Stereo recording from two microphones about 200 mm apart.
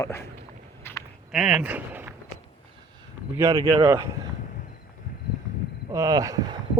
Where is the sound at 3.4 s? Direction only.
15° right (ahead or behind).